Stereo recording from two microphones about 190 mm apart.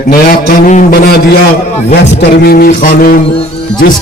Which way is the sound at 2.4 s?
50° left (ahead or behind).